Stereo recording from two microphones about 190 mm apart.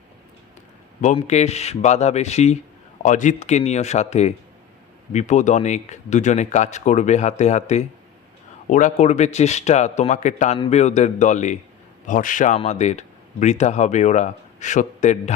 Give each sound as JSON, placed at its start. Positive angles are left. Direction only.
{"t": 1.0, "sound": "speech", "side_deg": 35}